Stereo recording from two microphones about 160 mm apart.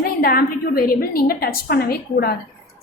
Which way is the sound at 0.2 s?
70° left (ahead or behind).